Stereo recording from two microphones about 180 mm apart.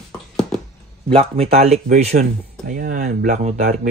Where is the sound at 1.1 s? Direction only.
30° right (ahead or behind).